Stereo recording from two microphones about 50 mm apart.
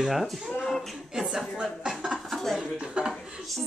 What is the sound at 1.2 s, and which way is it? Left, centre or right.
Speech, centre.